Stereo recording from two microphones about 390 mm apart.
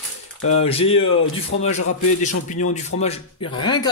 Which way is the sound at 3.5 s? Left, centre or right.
Centre.